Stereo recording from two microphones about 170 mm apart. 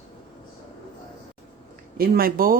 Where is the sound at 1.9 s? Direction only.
60° right (ahead or behind).